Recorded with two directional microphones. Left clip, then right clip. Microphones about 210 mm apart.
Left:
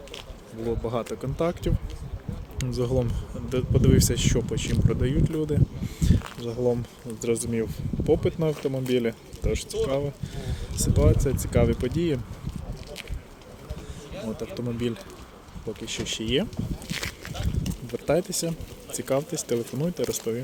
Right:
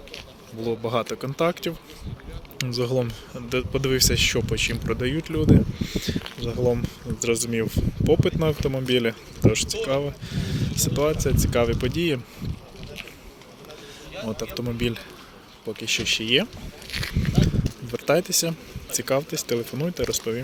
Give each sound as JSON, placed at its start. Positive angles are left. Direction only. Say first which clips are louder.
{"t": 0.6, "sound": "speech", "louder": "right 3 dB", "side_deg": 5}
{"t": 6.6, "sound": "speech", "louder": "right 2 dB", "side_deg": -5}
{"t": 7.2, "sound": "speech", "louder": "right 2 dB", "side_deg": 10}
{"t": 14.3, "sound": "speech", "louder": "right 2 dB", "side_deg": 5}
{"t": 16.0, "sound": "a sound", "louder": "right 4 dB", "side_deg": 10}
{"t": 17.9, "sound": "speech", "louder": "right 4 dB", "side_deg": 5}